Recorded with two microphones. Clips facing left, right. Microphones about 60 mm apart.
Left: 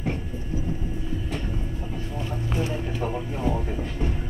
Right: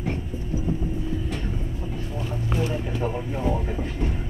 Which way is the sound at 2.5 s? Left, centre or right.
Centre.